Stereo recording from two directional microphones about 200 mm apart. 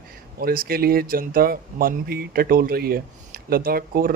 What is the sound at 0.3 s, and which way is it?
Speech, 45° right (ahead or behind).